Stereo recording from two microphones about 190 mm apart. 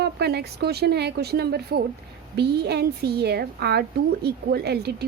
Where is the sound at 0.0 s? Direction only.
60° right (ahead or behind).